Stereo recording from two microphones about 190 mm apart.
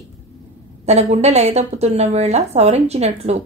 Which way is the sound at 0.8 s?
35° right (ahead or behind).